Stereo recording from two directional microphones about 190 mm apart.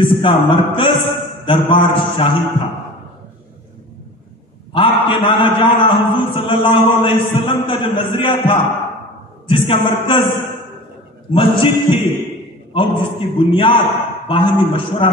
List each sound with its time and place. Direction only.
0.0 s a man's voice: 25° left (ahead or behind)
4.7 s a man's voice: 25° left (ahead or behind)
11.3 s a man's voice: 30° left (ahead or behind)